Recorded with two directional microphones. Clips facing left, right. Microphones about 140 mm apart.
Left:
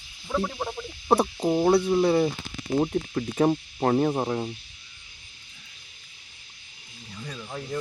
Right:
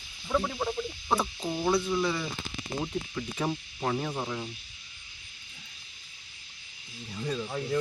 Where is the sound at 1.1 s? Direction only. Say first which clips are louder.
Left 7 dB; 65° left (ahead or behind).